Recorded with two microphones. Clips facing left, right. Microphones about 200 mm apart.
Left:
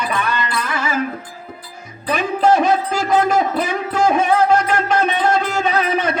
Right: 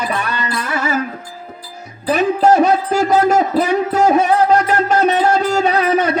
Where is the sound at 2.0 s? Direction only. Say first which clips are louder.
Right 3 dB; 40° right (ahead or behind).